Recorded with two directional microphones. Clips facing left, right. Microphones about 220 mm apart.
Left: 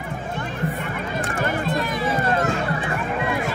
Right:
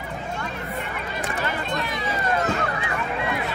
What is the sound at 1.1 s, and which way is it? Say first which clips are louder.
Run: left 4 dB; 50° left (ahead or behind).